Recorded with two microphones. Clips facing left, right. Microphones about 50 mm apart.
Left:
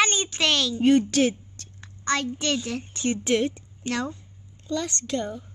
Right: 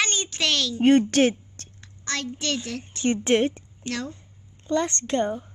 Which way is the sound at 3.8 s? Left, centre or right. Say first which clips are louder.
Left 3 dB; centre.